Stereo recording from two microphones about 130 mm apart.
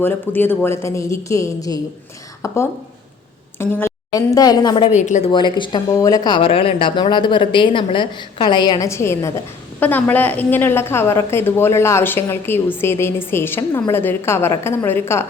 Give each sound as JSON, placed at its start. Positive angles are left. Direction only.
{"t": 0.0, "sound": "a woman's voice", "side_deg": 15}
{"t": 3.6, "sound": "speech", "side_deg": 20}
{"t": 4.9, "sound": "a woman's voice", "side_deg": 65}
{"t": 5.3, "sound": "speech", "side_deg": 40}
{"t": 5.9, "sound": "speech", "side_deg": 25}
{"t": 8.9, "sound": "a woman's voice", "side_deg": 20}